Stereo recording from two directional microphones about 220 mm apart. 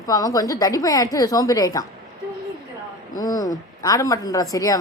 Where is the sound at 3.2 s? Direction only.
15° left (ahead or behind).